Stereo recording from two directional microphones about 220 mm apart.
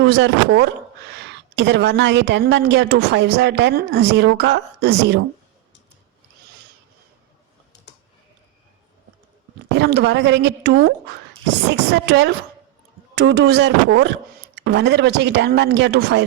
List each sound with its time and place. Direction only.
0.0 s a woman's voice: 55° right (ahead or behind)
9.7 s a woman's voice: 50° right (ahead or behind)